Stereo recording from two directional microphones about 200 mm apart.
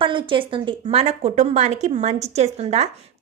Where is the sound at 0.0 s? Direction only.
25° right (ahead or behind).